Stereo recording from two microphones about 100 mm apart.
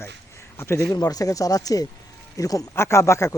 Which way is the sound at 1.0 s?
35° left (ahead or behind).